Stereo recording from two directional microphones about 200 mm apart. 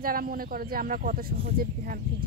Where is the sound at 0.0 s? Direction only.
45° right (ahead or behind).